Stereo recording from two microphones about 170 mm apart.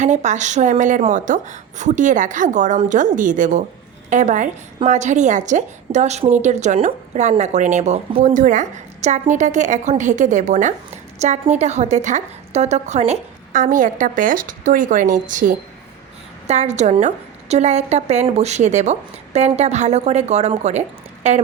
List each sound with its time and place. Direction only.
0.0 s a woman's voice: 45° right (ahead or behind)